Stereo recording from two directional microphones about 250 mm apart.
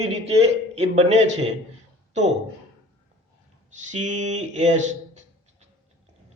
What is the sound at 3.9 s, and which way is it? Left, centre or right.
A man's voice, right.